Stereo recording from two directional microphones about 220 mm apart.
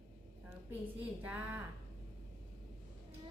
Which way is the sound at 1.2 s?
5° right (ahead or behind).